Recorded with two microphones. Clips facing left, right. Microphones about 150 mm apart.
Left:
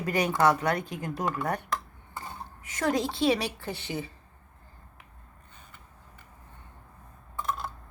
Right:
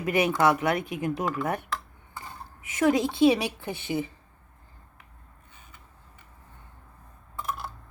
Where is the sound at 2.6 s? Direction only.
15° right (ahead or behind).